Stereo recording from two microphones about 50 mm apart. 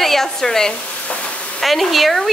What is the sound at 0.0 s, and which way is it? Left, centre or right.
Speech, centre.